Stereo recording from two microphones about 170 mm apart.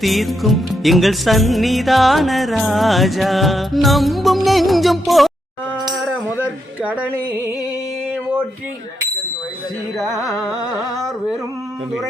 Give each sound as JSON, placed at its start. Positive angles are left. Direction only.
{"t": 0.0, "sound": "music", "side_deg": 0}
{"t": 5.8, "sound": "a sound", "side_deg": 0}
{"t": 6.8, "sound": "music", "side_deg": -10}
{"t": 10.2, "sound": "music", "side_deg": 20}